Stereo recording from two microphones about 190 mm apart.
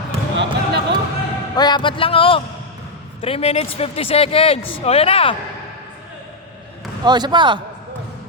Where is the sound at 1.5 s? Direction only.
20° left (ahead or behind).